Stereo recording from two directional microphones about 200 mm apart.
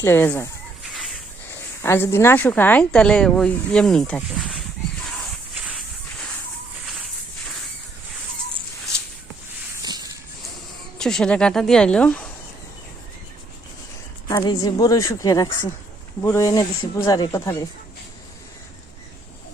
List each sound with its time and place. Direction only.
0.0 s speech: 10° left (ahead or behind)
0.9 s a sound: centre (ahead or behind)
1.8 s speech: 10° left (ahead or behind)
9.8 s a sound: 20° right (ahead or behind)
10.9 s speech: 5° left (ahead or behind)
14.3 s a woman's voice: 20° left (ahead or behind)